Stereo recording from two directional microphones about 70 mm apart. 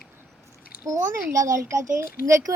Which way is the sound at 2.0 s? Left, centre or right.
Right.